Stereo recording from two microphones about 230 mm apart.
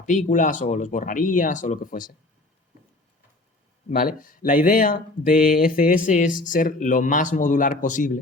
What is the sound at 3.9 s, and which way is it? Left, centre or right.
Speech, left.